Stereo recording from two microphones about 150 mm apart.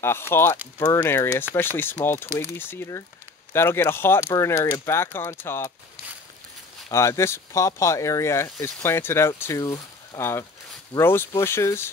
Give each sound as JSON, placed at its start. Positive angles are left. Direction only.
{"t": 0.0, "sound": "speech", "side_deg": 15}
{"t": 6.9, "sound": "speech", "side_deg": 20}